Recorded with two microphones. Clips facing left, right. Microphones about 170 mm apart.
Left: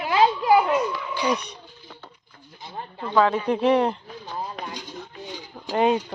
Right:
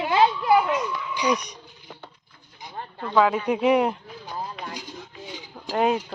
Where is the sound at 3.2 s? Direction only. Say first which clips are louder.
Even; 10° right (ahead or behind).